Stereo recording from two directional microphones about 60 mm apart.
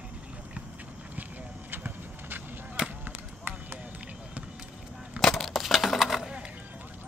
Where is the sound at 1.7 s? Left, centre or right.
Right.